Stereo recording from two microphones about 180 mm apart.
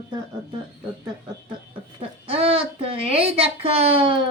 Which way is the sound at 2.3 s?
30° right (ahead or behind).